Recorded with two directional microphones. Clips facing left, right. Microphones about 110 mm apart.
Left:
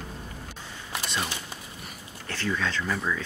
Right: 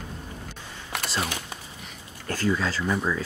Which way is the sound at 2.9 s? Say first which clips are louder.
Right 5 dB; 10° right (ahead or behind).